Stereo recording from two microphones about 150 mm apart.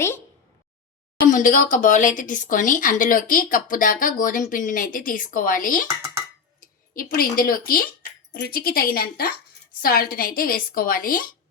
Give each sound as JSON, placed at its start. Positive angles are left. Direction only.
{"t": 1.3, "sound": "speech", "side_deg": 60}
{"t": 8.3, "sound": "a woman's voice", "side_deg": 90}